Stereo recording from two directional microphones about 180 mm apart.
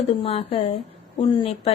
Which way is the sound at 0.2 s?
35° left (ahead or behind).